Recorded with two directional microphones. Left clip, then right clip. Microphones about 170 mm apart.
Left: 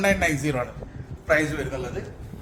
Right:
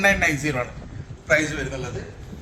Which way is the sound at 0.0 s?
50° left (ahead or behind).